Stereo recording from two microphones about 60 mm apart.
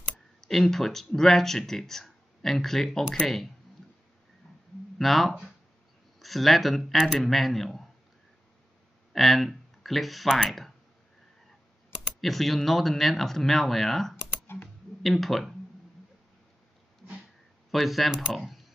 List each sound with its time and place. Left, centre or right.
0.4 s speech: centre
4.9 s speech: centre
9.1 s speech: centre
12.2 s speech: centre
14.5 s speech: left
15.0 s speech: centre
17.6 s speech: centre